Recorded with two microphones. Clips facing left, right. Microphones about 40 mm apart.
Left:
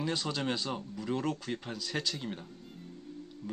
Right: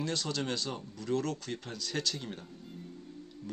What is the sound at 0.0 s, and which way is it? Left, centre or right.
Speech, centre.